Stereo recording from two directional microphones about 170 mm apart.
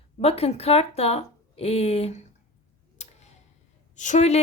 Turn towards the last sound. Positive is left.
turn(degrees=45)  # may be behind; listen again after turning